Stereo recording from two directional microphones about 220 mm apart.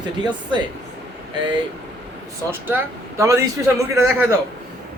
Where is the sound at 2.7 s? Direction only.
15° right (ahead or behind).